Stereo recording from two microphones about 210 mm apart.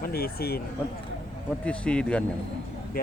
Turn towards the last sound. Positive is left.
turn(degrees=45)  # may be behind; listen again after turning